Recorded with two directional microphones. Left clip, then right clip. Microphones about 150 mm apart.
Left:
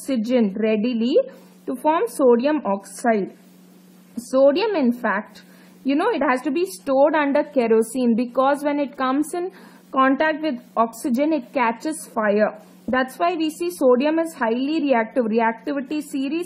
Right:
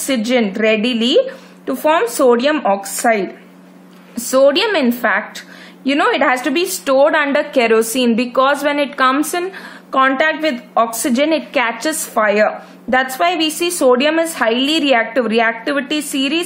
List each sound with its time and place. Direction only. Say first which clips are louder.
0.3 s speech: right 6 dB; 40° right (ahead or behind)
4.3 s a woman's voice: right 5 dB; 45° right (ahead or behind)
5.9 s a woman's voice: right 6 dB; 40° right (ahead or behind)